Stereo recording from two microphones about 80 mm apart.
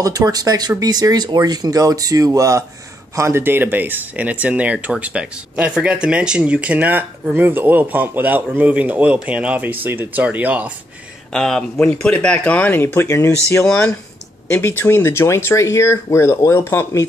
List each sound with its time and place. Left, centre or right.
0.0 s speech: right
3.2 s speech: right
11.3 s speech: centre; by 13.3 s left
14.5 s speech: left